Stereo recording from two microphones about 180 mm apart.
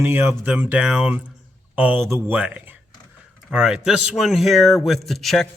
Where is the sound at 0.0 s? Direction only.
15° right (ahead or behind).